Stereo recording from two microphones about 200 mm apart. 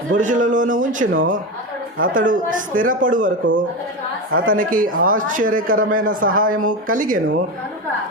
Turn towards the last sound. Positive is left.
turn(degrees=-45)  # may be behind; listen again after turning